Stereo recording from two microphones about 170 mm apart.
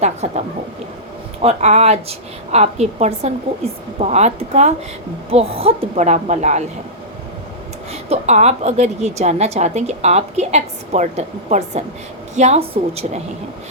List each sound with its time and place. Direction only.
0.0 s a woman's voice: 40° right (ahead or behind)
8.1 s a woman's voice: 40° right (ahead or behind)